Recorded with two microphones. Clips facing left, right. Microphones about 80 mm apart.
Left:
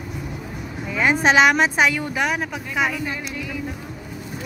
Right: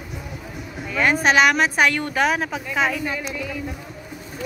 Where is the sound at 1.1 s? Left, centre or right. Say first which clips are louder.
Left 2 dB; left; by 3.6 s centre.